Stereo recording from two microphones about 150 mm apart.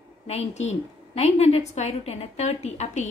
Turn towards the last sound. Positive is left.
turn(degrees=50)  # may be behind; listen again after turning